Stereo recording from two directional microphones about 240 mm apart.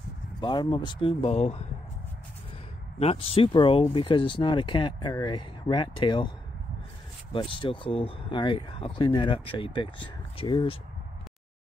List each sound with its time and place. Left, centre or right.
0.4 s speech: centre
3.0 s speech: left
7.3 s speech: left